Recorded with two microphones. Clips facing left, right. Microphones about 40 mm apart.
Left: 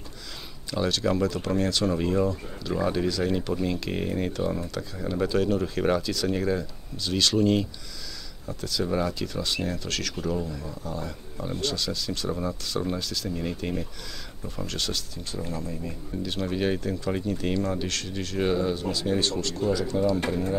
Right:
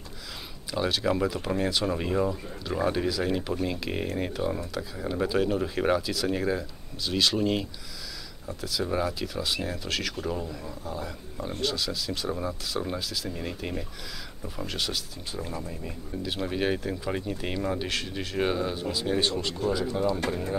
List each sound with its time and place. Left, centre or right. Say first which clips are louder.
0.7 s speech: left 1 dB; centre